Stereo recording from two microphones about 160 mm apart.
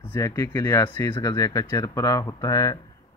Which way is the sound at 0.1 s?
20° left (ahead or behind).